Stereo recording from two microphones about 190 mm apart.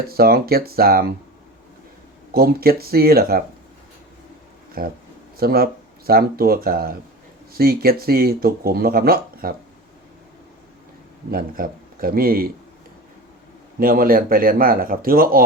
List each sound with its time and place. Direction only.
0.1 s speech: 55° right (ahead or behind)
2.3 s speech: 55° right (ahead or behind)
4.8 s speech: 55° right (ahead or behind)
11.3 s speech: 50° right (ahead or behind)
13.7 s speech: 50° right (ahead or behind)